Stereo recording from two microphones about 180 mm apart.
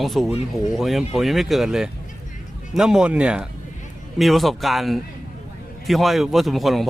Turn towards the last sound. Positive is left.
turn(degrees=0)  # may be behind; listen again after turning